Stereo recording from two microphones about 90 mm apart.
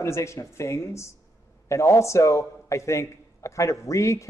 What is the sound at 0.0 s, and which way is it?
A man's voice, 30° left (ahead or behind).